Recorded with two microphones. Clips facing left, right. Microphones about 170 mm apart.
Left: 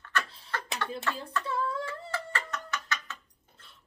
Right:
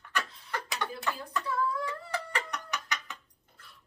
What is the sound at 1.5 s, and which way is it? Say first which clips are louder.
Female singing: right 1 dB; 25° left (ahead or behind).